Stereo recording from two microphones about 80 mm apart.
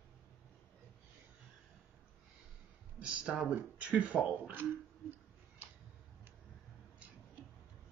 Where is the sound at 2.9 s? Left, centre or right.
Centre.